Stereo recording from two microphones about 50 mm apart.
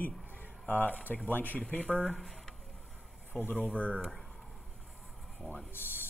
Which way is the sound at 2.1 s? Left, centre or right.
Centre.